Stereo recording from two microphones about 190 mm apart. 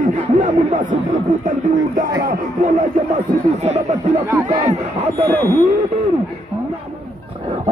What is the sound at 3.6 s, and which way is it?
Speech, 35° right (ahead or behind).